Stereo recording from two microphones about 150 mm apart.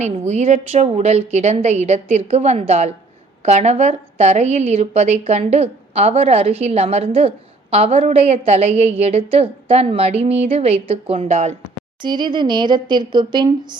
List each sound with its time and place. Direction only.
0.0 s a woman's voice: 50° right (ahead or behind)
12.0 s a woman's voice: 30° right (ahead or behind)